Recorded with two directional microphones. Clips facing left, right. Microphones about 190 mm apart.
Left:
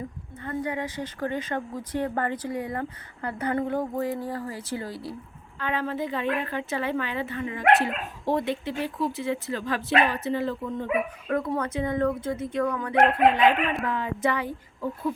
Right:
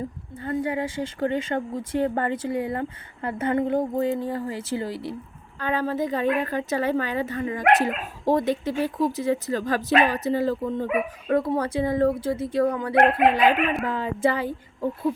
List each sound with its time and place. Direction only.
0.4 s speech: 30° right (ahead or behind)
5.5 s a woman's voice: 40° right (ahead or behind)